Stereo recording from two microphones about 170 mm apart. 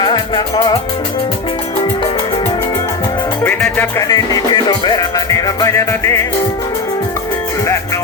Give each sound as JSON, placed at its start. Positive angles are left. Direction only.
{"t": 0.0, "sound": "music", "side_deg": 25}
{"t": 3.4, "sound": "music", "side_deg": 10}
{"t": 4.1, "sound": "music", "side_deg": 20}